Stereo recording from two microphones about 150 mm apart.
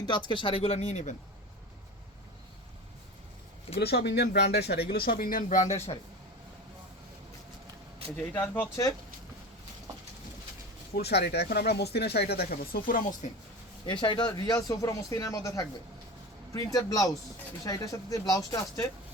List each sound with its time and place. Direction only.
0.3 s speech: 35° left (ahead or behind)
3.8 s speech: 90° left; by 5.6 s 60° left (ahead or behind)
5.7 s speech: 45° left (ahead or behind)
8.1 s speech: 10° left (ahead or behind)
10.9 s speech: 90° left; by 13.1 s 70° left (ahead or behind)
13.8 s speech: 30° left (ahead or behind)
16.7 s speech: 25° left (ahead or behind)